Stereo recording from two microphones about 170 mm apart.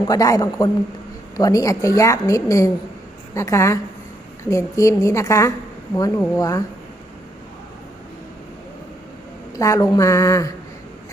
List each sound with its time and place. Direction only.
0.0 s a woman's voice: 20° left (ahead or behind)
9.6 s a woman's voice: 20° left (ahead or behind)